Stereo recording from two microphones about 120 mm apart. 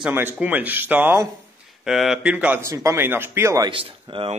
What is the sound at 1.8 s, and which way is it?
Speech, 5° right (ahead or behind).